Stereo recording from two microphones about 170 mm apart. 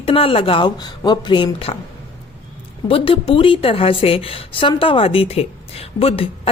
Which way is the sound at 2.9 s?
30° left (ahead or behind).